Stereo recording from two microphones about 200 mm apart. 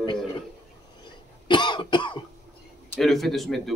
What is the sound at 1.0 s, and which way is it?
Cough, 25° left (ahead or behind).